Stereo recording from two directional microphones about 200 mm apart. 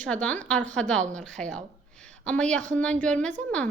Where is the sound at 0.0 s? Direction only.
5° left (ahead or behind).